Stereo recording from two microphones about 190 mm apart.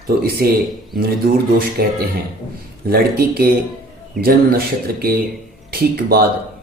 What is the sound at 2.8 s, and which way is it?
Speech, 50° right (ahead or behind).